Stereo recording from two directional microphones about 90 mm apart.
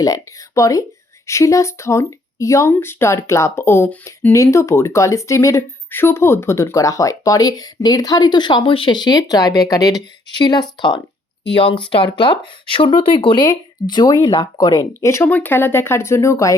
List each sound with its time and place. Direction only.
0.0 s speech: 40° left (ahead or behind)
10.3 s speech: 55° left (ahead or behind)
11.5 s speech: 70° left (ahead or behind); by 15.3 s 35° left (ahead or behind)
15.3 s speech: 20° left (ahead or behind); by 16.6 s 35° left (ahead or behind)